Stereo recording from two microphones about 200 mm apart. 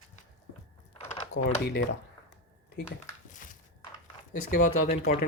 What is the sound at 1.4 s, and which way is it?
Speech, 55° left (ahead or behind).